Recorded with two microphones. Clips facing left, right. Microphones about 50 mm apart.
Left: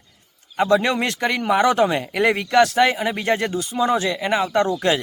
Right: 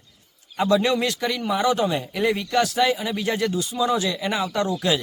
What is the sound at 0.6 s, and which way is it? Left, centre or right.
Speech, left.